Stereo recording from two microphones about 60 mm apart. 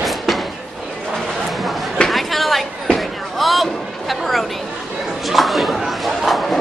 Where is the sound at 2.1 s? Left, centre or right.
Centre.